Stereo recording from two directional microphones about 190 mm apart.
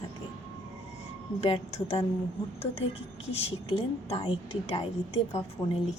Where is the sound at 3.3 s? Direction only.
30° left (ahead or behind).